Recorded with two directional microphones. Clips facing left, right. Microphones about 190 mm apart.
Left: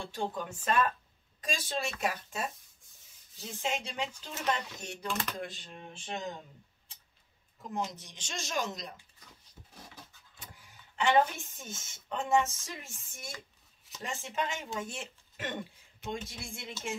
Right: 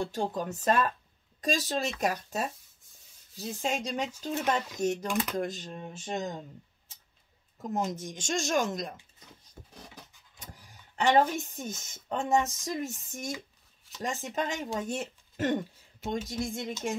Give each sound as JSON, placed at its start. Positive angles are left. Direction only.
{"t": 0.0, "sound": "speech", "side_deg": -40}
{"t": 7.6, "sound": "speech", "side_deg": -45}
{"t": 9.6, "sound": "a sound", "side_deg": -50}
{"t": 10.5, "sound": "speech", "side_deg": -40}